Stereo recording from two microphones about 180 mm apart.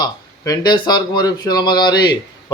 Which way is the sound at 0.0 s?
20° left (ahead or behind).